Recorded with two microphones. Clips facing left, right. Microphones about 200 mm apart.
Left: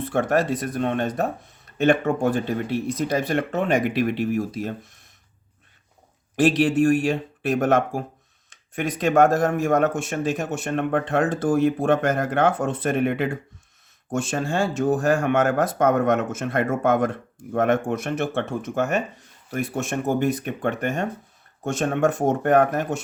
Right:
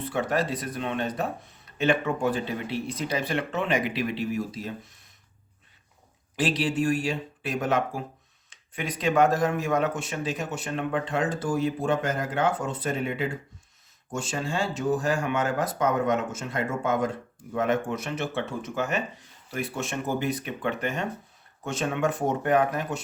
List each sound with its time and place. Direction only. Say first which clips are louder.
0.0 s speech: left 5 dB; 50° left (ahead or behind)
6.3 s speech: left 7 dB; 50° left (ahead or behind)